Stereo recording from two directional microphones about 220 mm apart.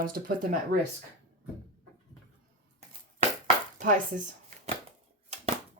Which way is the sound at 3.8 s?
35° right (ahead or behind).